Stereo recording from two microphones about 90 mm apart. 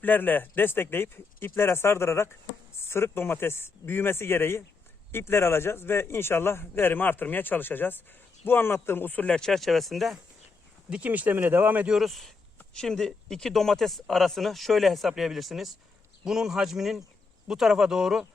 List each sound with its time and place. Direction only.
0.0 s a man's voice: 20° left (ahead or behind); by 10.2 s centre (ahead or behind)
10.8 s speech: 15° right (ahead or behind)
11.9 s speech: centre (ahead or behind)